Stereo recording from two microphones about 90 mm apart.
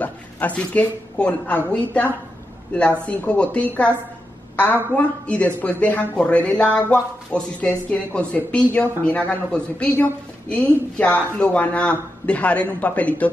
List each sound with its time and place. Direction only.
0.0 s a woman's voice: 15° left (ahead or behind)
4.9 s a woman's voice: 15° left (ahead or behind)